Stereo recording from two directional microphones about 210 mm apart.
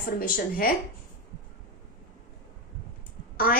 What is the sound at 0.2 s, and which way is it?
Speech, 45° left (ahead or behind).